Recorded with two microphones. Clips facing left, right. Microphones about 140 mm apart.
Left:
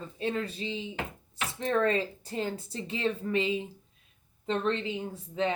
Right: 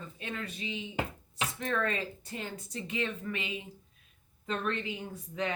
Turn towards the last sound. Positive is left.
turn(degrees=25)  # may be behind; listen again after turning